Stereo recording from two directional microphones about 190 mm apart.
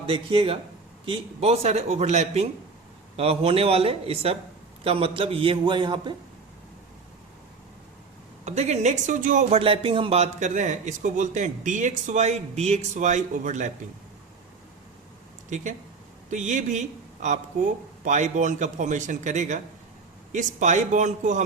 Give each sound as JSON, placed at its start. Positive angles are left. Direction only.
{"t": 0.1, "sound": "a man's voice", "side_deg": -30}
{"t": 8.4, "sound": "speech", "side_deg": -35}
{"t": 15.4, "sound": "a man's voice", "side_deg": -40}